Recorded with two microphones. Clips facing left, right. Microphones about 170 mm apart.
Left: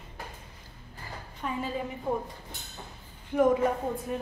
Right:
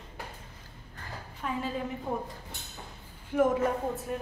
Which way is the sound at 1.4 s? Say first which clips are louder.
Even; centre (ahead or behind).